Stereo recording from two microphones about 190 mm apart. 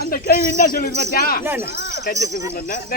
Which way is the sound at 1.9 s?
60° left (ahead or behind).